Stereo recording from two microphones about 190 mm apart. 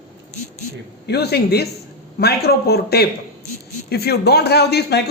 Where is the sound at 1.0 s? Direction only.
60° left (ahead or behind).